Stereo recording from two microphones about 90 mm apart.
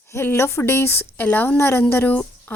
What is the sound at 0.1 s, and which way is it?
A woman's voice, 30° left (ahead or behind).